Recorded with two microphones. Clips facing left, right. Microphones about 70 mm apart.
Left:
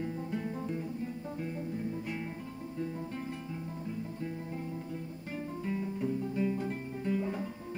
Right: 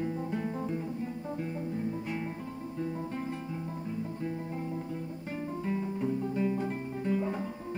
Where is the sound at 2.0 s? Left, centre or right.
Centre.